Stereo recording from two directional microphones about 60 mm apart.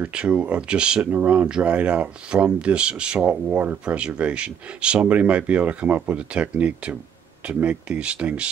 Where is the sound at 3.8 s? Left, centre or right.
Centre.